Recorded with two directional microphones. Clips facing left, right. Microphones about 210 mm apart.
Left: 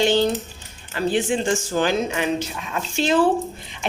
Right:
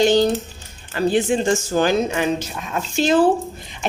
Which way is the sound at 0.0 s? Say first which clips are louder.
Right 3 dB; 40° right (ahead or behind).